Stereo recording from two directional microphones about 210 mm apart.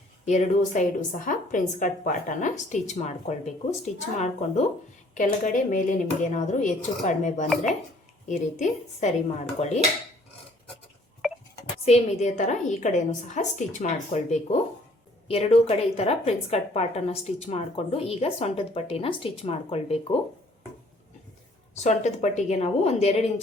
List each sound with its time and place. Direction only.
0.3 s a woman's voice: 35° left (ahead or behind)
11.2 s a sound: centre (ahead or behind)
11.9 s a woman's voice: 30° left (ahead or behind)
21.8 s a woman's voice: 35° left (ahead or behind)